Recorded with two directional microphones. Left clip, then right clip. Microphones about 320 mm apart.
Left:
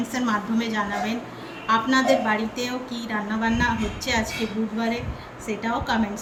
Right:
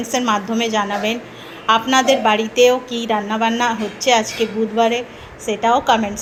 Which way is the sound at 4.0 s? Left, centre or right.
Centre.